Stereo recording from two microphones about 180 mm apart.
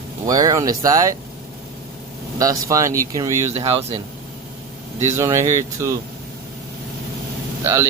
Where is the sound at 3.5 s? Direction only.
35° right (ahead or behind).